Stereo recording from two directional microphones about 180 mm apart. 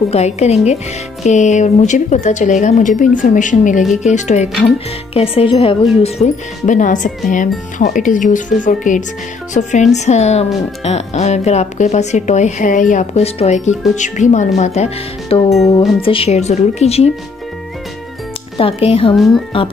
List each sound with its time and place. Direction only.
0.1 s speech: 35° left (ahead or behind)
18.6 s speech: 30° left (ahead or behind)